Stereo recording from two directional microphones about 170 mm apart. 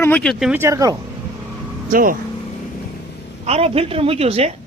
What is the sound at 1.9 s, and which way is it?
Speech, 55° right (ahead or behind).